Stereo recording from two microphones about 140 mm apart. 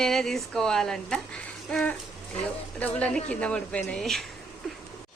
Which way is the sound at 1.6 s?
5° left (ahead or behind).